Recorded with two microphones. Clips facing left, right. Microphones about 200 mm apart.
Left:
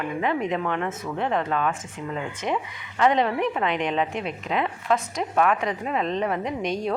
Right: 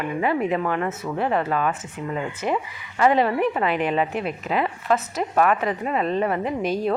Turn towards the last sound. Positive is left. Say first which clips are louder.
# right 3 dB
turn(degrees=-5)  # may be behind; listen again after turning